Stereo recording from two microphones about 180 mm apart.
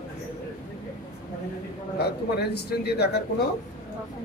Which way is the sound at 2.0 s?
65° left (ahead or behind).